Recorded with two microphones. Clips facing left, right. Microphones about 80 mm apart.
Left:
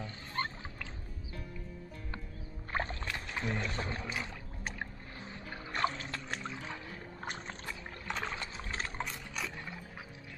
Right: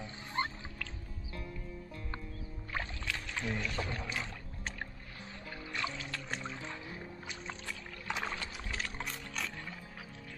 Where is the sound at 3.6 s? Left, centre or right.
Left.